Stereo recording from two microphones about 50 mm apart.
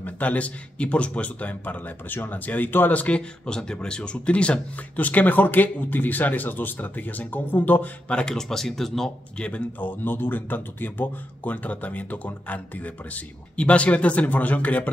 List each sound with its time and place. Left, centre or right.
0.0 s speech: left
2.9 s speech: left
8.1 s speech: left
8.4 s speech: centre
9.8 s speech: left